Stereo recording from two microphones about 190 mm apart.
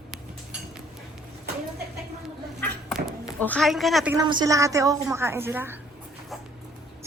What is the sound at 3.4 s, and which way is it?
Speech, 5° left (ahead or behind).